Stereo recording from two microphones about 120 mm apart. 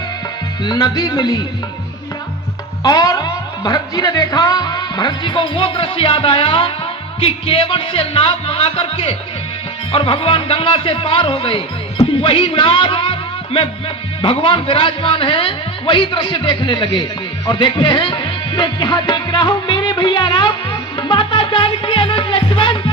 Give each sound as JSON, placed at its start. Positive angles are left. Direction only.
{"t": 0.6, "sound": "speech", "side_deg": 35}
{"t": 2.8, "sound": "a man's voice", "side_deg": 30}